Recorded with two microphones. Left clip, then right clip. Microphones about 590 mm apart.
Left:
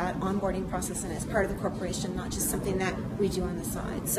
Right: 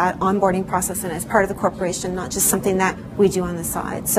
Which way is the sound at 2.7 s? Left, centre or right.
Right.